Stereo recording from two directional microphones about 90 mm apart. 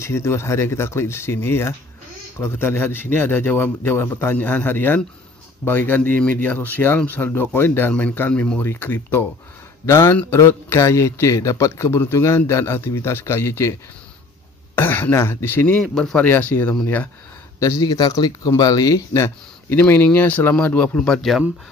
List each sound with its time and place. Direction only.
0.0 s a man's voice: 30° left (ahead or behind)
14.8 s a man's voice: 25° left (ahead or behind)
15.9 s speech: 5° left (ahead or behind)
16.3 s a man's voice: 20° left (ahead or behind)
17.6 s speech: 35° left (ahead or behind)
17.8 s a man's voice: 45° left (ahead or behind)
19.8 s speech: 20° left (ahead or behind); by 21.5 s centre (ahead or behind)